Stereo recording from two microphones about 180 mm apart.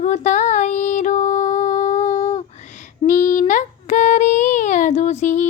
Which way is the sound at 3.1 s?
45° left (ahead or behind).